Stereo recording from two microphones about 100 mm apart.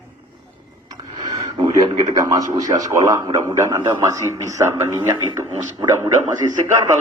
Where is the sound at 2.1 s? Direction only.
40° right (ahead or behind).